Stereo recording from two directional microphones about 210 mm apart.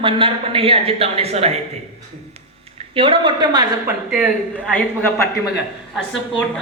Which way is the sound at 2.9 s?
25° right (ahead or behind).